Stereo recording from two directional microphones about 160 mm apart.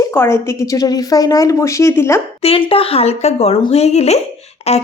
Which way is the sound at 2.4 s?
35° left (ahead or behind).